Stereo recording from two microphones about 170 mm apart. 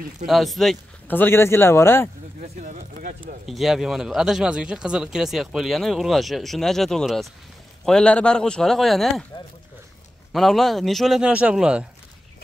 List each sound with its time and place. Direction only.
0.3 s speech: centre (ahead or behind)
1.1 s speech: 15° left (ahead or behind)
2.4 s speech: 50° right (ahead or behind)
3.4 s speech: centre (ahead or behind)
10.3 s speech: centre (ahead or behind)